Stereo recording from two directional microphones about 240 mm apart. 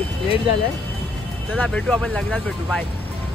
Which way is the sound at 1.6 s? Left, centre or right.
Centre.